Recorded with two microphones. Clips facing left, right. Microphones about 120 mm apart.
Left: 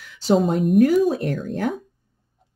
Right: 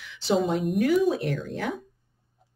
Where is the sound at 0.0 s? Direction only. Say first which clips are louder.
Left 5 dB; 45° left (ahead or behind).